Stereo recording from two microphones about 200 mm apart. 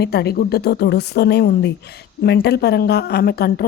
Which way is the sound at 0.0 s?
55° left (ahead or behind).